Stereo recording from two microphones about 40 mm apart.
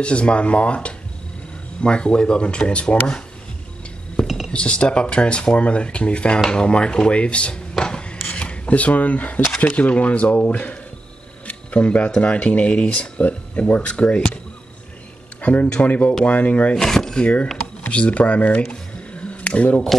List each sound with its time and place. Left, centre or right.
0.0 s speech: left
4.5 s speech: left
7.8 s dishes: left
9.6 s speech: left
11.4 s camera: left
12.2 s speech: left
15.4 s speech: left
16.7 s speech: centre
17.2 s speech: left
18.6 s a sound: left